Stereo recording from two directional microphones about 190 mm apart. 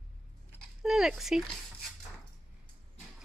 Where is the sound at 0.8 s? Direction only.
Centre (ahead or behind).